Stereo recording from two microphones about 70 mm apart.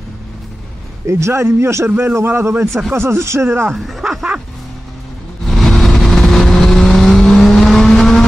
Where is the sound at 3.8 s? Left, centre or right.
Centre.